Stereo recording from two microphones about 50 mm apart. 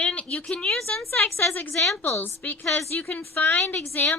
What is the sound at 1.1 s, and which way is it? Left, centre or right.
Speech, left.